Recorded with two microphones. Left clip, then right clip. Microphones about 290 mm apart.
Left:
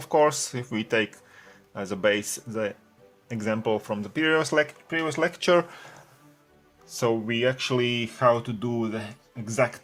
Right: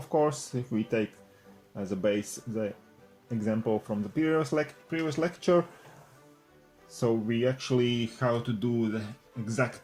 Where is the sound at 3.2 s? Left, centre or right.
Left.